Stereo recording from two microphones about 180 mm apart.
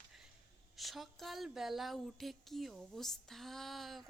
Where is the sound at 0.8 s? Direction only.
Centre (ahead or behind).